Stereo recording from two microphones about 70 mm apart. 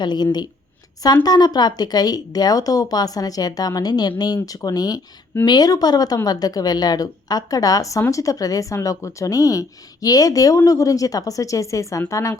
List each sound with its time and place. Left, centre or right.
0.0 s speech: left
1.0 s speech: left
4.4 s speech: left